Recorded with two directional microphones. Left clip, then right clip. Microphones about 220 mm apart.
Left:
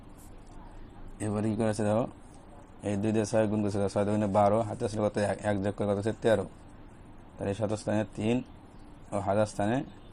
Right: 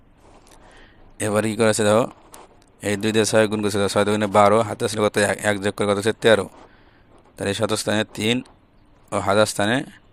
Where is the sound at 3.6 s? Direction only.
85° right.